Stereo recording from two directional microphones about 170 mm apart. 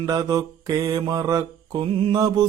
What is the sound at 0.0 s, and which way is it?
Mantra, 25° right (ahead or behind).